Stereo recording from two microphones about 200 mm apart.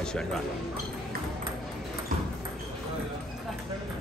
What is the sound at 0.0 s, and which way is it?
Speech, 5° left (ahead or behind).